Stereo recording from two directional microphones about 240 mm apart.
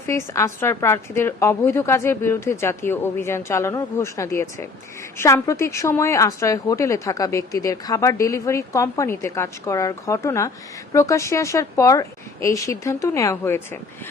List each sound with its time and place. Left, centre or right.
0.0 s a woman's voice: centre